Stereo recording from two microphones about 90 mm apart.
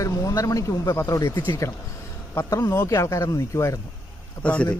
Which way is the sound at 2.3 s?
30° left (ahead or behind).